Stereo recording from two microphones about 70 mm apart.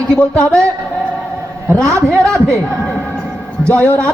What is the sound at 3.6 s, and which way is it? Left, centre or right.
Speech, right.